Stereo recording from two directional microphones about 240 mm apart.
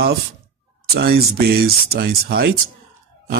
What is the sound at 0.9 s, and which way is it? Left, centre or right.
Speech, right.